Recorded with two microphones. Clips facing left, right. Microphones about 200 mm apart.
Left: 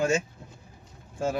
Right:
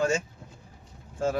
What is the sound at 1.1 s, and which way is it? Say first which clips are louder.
Speech: right 1 dB; 5° left (ahead or behind).